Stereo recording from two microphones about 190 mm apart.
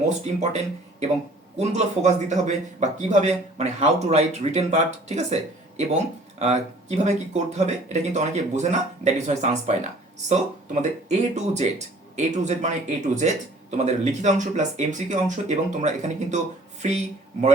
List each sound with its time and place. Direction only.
0.1 s speech: 35° right (ahead or behind)